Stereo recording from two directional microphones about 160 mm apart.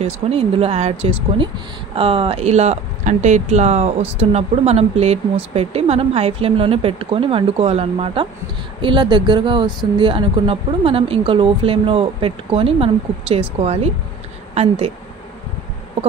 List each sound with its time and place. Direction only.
0.0 s a woman's voice: 40° right (ahead or behind)